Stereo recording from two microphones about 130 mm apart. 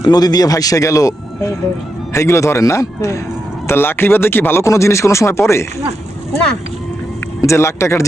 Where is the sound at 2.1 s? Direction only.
25° left (ahead or behind).